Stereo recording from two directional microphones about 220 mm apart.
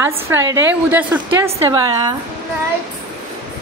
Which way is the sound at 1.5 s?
20° right (ahead or behind).